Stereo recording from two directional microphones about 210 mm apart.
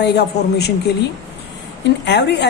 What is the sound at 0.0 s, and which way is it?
Speech, 55° left (ahead or behind).